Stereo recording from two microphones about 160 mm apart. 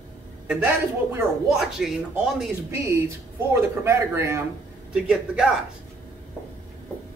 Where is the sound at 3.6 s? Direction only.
15° right (ahead or behind).